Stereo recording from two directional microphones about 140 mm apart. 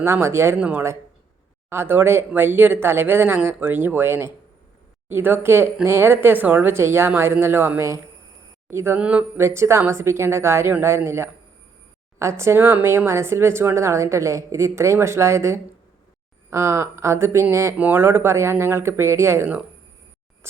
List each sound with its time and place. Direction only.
0.0 s a woman's voice: 20° right (ahead or behind)
20.4 s music: 20° right (ahead or behind)